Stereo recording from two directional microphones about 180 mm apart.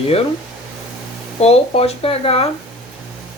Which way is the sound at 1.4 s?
35° left (ahead or behind).